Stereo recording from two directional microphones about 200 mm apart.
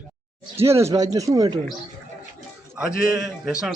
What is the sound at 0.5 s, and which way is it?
Speech, 15° right (ahead or behind).